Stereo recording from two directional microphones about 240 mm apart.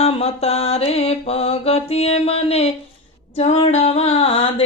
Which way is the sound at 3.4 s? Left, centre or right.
Left.